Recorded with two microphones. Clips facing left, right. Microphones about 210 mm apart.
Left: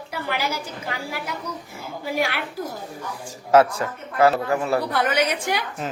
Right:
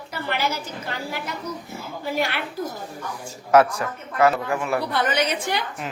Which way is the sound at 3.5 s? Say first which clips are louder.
Left 1 dB; 30° left (ahead or behind).